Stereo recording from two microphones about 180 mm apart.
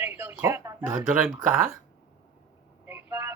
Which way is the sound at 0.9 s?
50° right (ahead or behind).